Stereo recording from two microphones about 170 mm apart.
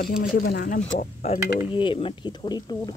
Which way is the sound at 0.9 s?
45° left (ahead or behind).